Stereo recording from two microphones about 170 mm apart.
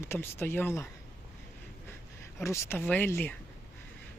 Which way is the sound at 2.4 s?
15° left (ahead or behind).